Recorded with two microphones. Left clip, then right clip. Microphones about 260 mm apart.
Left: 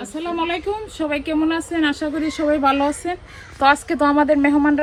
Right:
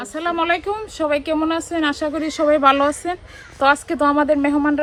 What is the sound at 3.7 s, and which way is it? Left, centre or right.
Speech, centre.